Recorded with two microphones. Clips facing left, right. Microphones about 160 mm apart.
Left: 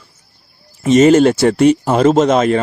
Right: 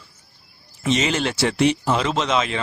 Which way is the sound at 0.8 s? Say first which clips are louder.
Left 13 dB; 45° left (ahead or behind).